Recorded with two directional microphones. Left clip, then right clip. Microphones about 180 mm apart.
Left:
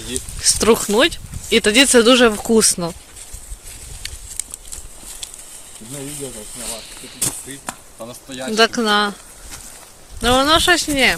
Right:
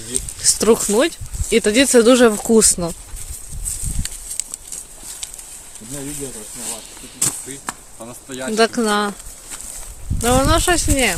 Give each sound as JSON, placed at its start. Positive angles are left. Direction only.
{"t": 0.4, "sound": "speech", "side_deg": -5}
{"t": 4.0, "sound": "horse", "side_deg": -25}
{"t": 7.2, "sound": "speech", "side_deg": 25}
{"t": 8.5, "sound": "speech", "side_deg": -10}